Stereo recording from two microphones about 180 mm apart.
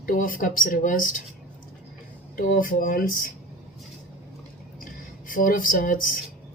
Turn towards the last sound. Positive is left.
turn(degrees=50)  # may be behind; listen again after turning